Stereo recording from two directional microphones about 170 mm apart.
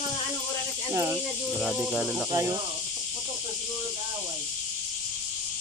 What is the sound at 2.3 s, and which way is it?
Speech, 20° right (ahead or behind).